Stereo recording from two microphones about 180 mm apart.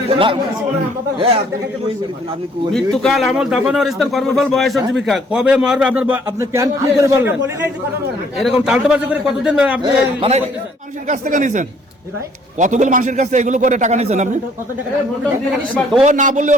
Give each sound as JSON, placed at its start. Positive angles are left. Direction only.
{"t": 0.1, "sound": "a man's voice", "side_deg": -30}
{"t": 2.7, "sound": "speech", "side_deg": 0}
{"t": 8.4, "sound": "speech", "side_deg": 0}
{"t": 9.8, "sound": "a man's voice", "side_deg": -30}
{"t": 11.1, "sound": "speech", "side_deg": -45}
{"t": 16.0, "sound": "speech", "side_deg": -45}